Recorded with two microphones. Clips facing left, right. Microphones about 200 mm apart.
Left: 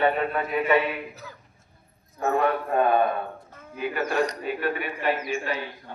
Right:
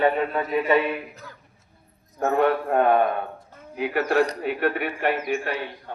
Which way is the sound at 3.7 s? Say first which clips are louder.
Right 4 dB; 75° right (ahead or behind).